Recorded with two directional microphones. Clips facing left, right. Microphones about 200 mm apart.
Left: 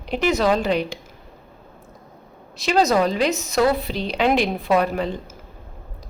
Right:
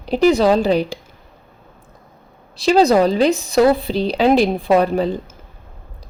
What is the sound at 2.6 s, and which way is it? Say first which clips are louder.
Speech: right 5 dB; 30° right (ahead or behind).